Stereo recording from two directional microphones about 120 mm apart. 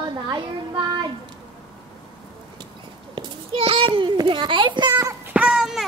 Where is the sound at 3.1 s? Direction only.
50° right (ahead or behind).